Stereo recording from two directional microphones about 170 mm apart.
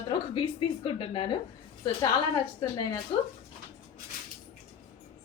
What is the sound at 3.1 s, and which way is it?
Speech, 40° left (ahead or behind).